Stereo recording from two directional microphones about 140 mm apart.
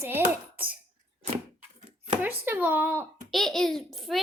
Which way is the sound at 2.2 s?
15° right (ahead or behind).